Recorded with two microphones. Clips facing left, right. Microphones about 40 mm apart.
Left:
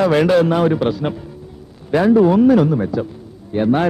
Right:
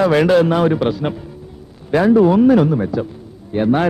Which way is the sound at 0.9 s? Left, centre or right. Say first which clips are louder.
Even; centre.